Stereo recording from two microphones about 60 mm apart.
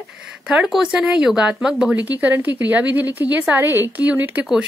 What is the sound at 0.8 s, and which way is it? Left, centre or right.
A woman's voice, centre.